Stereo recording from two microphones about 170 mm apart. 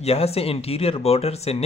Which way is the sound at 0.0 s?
35° left (ahead or behind).